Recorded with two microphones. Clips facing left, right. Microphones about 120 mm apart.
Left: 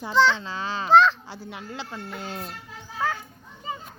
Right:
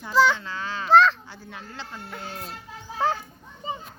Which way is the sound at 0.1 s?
5° right (ahead or behind).